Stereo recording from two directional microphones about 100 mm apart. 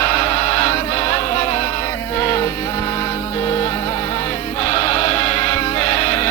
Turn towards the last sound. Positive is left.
turn(degrees=30)  # may be behind; listen again after turning